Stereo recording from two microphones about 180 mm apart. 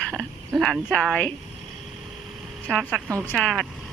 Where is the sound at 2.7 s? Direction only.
5° left (ahead or behind).